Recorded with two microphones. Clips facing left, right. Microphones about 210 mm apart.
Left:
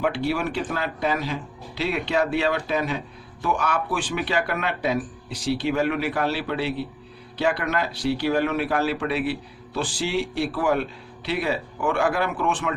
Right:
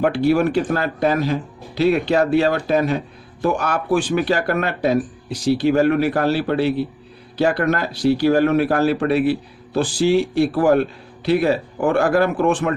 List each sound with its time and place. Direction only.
0.0 s speech: 45° right (ahead or behind)